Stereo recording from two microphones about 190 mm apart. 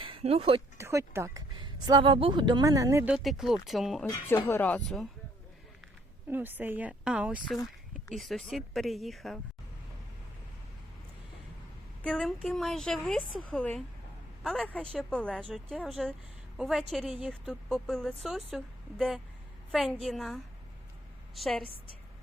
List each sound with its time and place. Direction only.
0.0 s speech: 30° right (ahead or behind)
0.8 s speech: 15° right (ahead or behind)
3.2 s a woman's voice: centre (ahead or behind)
6.3 s a woman's voice: 10° right (ahead or behind)
12.0 s a woman's voice: 5° left (ahead or behind)